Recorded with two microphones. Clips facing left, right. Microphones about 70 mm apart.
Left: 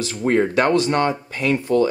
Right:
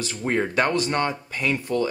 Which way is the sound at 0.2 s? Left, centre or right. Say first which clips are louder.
Left 6 dB; centre.